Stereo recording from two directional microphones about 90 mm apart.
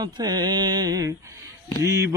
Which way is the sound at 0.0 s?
50° right (ahead or behind).